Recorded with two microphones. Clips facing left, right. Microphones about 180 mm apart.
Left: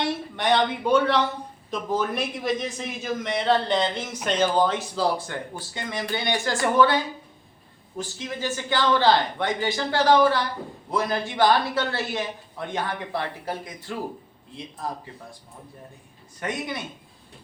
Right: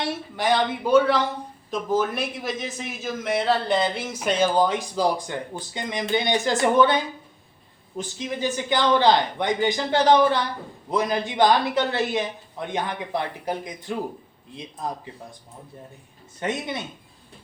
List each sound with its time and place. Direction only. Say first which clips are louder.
0.3 s a man's voice: even; centre (ahead or behind); by 15.4 s 20° right (ahead or behind)
16.4 s speech: right 2 dB; 25° right (ahead or behind)